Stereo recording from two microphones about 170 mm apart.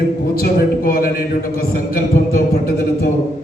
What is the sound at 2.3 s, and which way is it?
Speech, 60° left (ahead or behind).